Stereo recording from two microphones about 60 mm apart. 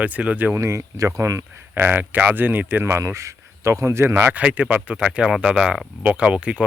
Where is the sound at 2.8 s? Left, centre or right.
Right.